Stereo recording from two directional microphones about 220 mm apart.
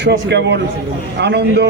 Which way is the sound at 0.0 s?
50° right (ahead or behind).